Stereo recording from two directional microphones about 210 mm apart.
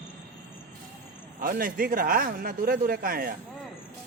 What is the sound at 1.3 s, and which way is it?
A man's voice, 45° right (ahead or behind).